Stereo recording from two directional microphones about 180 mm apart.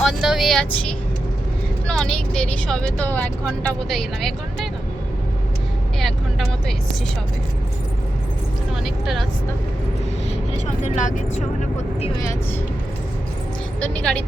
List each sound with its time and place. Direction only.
0.0 s speech: centre (ahead or behind)
6.0 s speech: centre (ahead or behind)
8.7 s speech: centre (ahead or behind)
10.8 s speech: 45° left (ahead or behind)
13.8 s a woman's voice: 5° left (ahead or behind)